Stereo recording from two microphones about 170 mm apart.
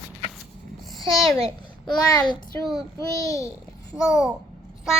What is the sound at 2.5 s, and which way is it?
Child singing, 15° left (ahead or behind).